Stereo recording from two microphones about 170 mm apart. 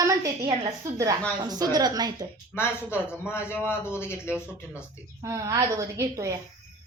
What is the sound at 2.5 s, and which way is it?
A man's voice, 15° left (ahead or behind).